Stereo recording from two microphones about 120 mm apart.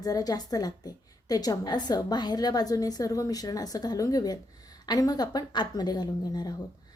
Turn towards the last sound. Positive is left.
turn(degrees=35)  # may be behind; listen again after turning